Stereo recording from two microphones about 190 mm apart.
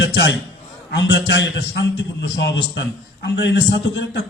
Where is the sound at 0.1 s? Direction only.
70° left (ahead or behind).